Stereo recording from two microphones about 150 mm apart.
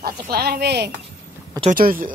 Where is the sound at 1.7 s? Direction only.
70° right (ahead or behind).